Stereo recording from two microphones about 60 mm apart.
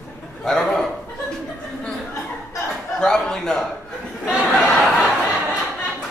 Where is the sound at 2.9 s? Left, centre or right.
Centre.